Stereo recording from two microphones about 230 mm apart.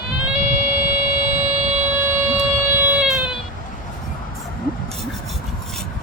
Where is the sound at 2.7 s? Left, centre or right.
Centre.